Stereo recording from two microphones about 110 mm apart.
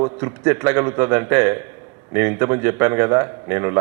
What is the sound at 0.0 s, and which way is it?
A man's voice, 25° right (ahead or behind).